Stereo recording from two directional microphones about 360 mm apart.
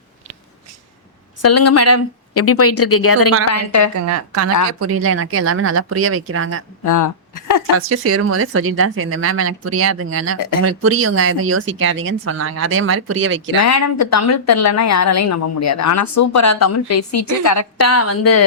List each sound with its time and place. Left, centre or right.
1.4 s a woman's voice: left
4.0 s a woman's voice: right
6.8 s a sound: left
7.8 s speech: right
13.6 s a woman's voice: left